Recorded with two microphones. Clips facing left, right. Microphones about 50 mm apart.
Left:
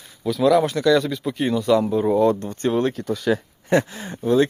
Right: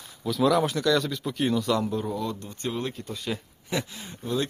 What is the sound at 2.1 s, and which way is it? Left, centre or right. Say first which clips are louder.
Speech: left 13 dB; left.